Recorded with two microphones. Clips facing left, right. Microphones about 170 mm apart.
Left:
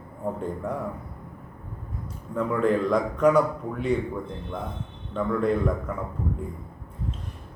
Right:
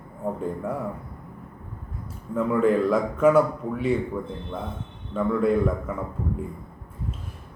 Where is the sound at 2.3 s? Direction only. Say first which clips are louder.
Right 2 dB; 5° right (ahead or behind).